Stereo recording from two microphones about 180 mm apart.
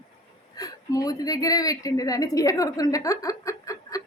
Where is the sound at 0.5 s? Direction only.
20° left (ahead or behind).